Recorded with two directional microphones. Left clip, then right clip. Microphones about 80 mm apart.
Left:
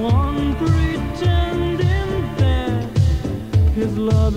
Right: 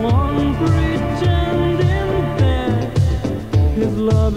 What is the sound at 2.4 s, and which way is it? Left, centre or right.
Music, left.